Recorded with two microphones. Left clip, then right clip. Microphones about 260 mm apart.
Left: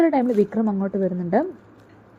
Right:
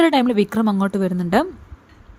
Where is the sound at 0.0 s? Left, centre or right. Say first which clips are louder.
Right 2 dB; right.